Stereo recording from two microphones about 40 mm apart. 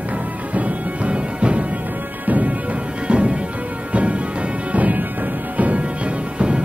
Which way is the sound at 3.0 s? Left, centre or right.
Right.